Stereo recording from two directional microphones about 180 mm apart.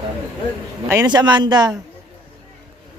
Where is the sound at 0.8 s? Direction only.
20° right (ahead or behind).